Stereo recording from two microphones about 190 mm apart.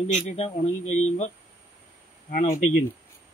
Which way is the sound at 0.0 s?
35° left (ahead or behind).